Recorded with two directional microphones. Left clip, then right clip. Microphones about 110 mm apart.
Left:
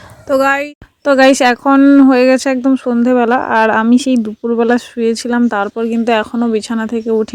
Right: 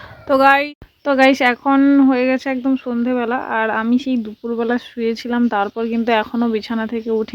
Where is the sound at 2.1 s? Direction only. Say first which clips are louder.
Left 7 dB; 60° left (ahead or behind).